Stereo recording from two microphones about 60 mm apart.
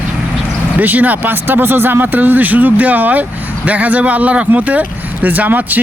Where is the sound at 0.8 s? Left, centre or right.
Right.